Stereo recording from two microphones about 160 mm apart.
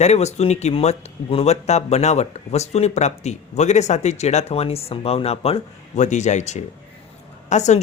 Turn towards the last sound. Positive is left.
turn(degrees=45)  # may be behind; listen again after turning